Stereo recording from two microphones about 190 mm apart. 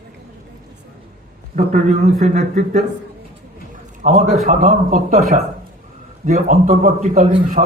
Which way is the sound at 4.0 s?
35° right (ahead or behind).